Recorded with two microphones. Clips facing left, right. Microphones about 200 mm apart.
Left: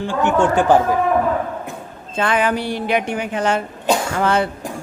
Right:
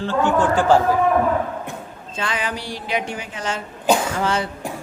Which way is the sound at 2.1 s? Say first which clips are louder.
Left 8 dB; 55° left (ahead or behind).